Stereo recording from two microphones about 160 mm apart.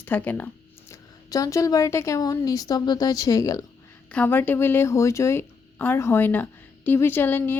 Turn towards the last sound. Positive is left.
turn(degrees=10)  # may be behind; listen again after turning